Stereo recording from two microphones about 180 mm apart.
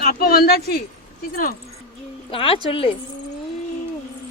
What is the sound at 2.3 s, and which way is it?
Speech, 30° left (ahead or behind).